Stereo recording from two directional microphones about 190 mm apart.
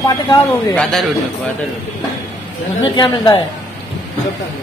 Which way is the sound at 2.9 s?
25° left (ahead or behind).